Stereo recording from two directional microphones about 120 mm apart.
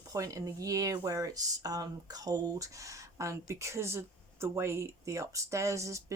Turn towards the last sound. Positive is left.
turn(degrees=-25)  # may be behind; listen again after turning